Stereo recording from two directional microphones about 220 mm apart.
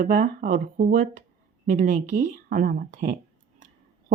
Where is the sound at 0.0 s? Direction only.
40° right (ahead or behind).